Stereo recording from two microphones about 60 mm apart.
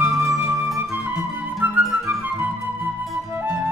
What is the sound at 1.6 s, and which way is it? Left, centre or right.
Music, right.